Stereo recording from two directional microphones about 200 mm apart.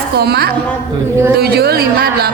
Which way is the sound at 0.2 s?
50° right (ahead or behind).